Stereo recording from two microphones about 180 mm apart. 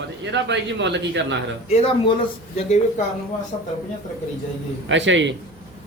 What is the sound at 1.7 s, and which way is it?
Speech, 35° left (ahead or behind).